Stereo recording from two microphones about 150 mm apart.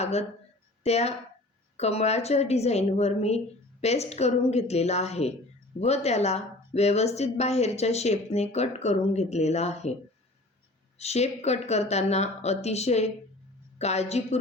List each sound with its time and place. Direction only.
0.0 s a woman's voice: 45° left (ahead or behind)
10.9 s a woman's voice: 45° left (ahead or behind)